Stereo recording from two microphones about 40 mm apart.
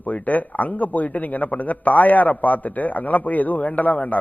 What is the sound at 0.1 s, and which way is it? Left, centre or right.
A man's voice, left.